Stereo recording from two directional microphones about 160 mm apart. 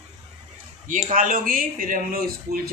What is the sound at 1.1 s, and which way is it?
Speech, 60° right (ahead or behind).